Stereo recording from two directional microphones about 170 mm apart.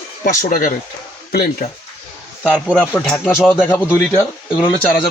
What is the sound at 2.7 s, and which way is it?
Speech, 5° left (ahead or behind).